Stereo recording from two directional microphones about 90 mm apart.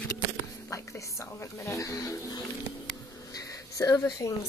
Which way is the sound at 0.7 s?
35° left (ahead or behind).